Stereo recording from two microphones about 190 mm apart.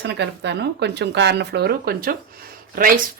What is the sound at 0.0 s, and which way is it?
Speech, 65° right (ahead or behind).